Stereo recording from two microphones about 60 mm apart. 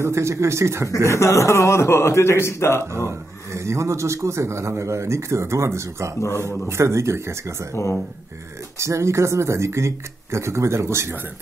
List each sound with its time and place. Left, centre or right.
0.0 s a man's voice: right
1.0 s a man's voice: left
3.1 s a man's voice: right
6.1 s a man's voice: left
6.7 s a man's voice: right
7.7 s a man's voice: left
8.7 s a man's voice: right